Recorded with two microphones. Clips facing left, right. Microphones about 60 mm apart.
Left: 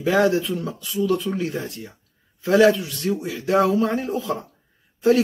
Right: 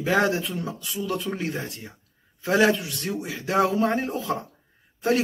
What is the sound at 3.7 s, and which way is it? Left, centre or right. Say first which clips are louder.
Speech: left 2 dB; right.